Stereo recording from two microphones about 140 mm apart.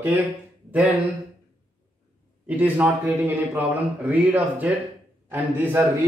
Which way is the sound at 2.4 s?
10° right (ahead or behind).